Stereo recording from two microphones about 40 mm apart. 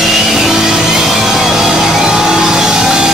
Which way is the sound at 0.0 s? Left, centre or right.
Centre.